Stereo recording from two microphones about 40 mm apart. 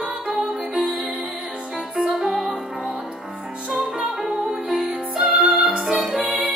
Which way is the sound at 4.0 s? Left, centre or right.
Centre.